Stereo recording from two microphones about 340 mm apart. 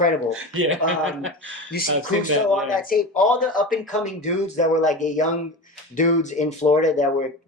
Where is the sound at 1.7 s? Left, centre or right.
Left.